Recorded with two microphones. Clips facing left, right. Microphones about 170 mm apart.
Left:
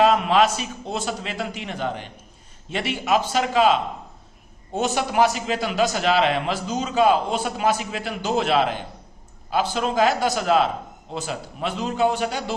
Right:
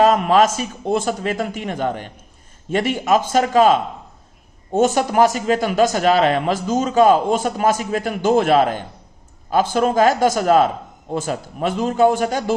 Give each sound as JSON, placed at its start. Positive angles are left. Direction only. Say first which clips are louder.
{"t": 0.0, "sound": "a man's voice", "louder": "right 3 dB", "side_deg": -45}